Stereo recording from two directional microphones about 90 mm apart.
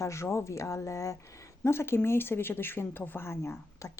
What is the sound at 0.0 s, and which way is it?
Speech, 30° left (ahead or behind).